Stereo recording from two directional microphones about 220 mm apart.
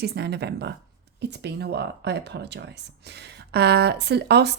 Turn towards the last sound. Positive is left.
turn(degrees=-50)  # may be behind; listen again after turning